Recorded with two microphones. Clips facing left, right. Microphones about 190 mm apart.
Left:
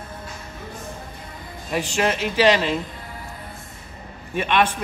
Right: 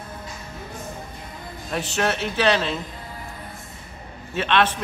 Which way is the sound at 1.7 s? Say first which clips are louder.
Left 2 dB; 10° left (ahead or behind).